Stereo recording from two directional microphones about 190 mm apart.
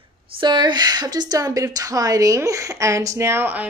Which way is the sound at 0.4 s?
25° right (ahead or behind).